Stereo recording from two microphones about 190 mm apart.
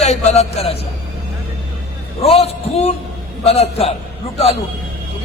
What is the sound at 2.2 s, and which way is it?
A man's voice, 30° left (ahead or behind).